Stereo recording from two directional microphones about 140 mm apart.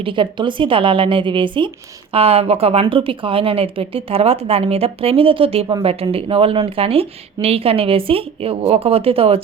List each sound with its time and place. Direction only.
0.0 s speech: 35° right (ahead or behind)